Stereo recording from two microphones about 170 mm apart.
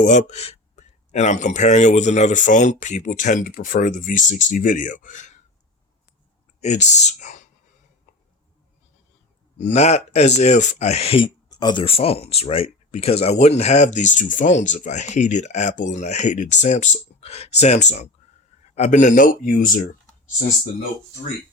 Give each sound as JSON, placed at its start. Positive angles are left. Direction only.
{"t": 0.0, "sound": "speech", "side_deg": 45}
{"t": 6.6, "sound": "speech", "side_deg": 40}
{"t": 9.6, "sound": "speech", "side_deg": 40}